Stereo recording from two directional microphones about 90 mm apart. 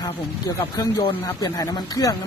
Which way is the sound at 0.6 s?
45° left (ahead or behind).